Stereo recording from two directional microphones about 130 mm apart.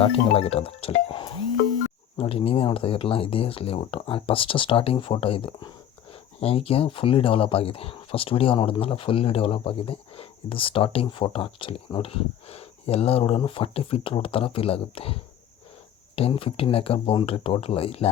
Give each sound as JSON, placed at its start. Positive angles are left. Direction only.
{"t": 0.3, "sound": "speech", "side_deg": 50}